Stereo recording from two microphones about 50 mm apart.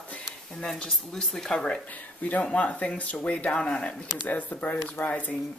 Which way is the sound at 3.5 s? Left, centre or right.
Centre.